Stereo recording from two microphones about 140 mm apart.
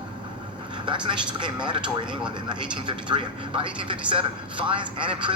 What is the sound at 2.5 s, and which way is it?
Speech, 35° right (ahead or behind).